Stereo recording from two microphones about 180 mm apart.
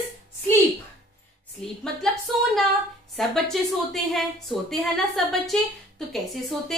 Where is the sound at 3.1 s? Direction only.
Centre (ahead or behind).